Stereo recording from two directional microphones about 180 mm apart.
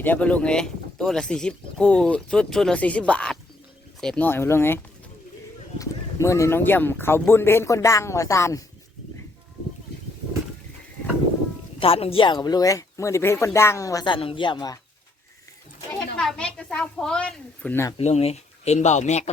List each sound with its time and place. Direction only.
0.0 s speech: 10° left (ahead or behind)
5.8 s speech: 15° left (ahead or behind)
11.8 s speech: 30° left (ahead or behind)
16.1 s speech: 5° left (ahead or behind)
17.9 s speech: 35° left (ahead or behind)